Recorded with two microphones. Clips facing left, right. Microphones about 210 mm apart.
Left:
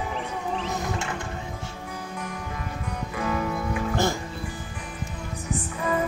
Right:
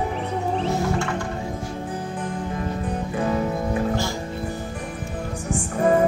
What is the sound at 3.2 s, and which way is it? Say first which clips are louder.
Music: right 4 dB; 30° right (ahead or behind).